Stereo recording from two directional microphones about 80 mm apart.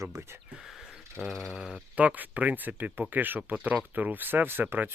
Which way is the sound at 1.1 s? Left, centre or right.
Centre.